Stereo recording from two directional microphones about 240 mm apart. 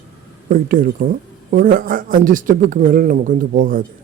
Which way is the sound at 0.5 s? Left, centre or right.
Right.